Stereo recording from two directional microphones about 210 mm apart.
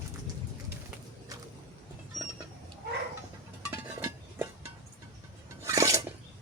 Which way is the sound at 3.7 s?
10° right (ahead or behind).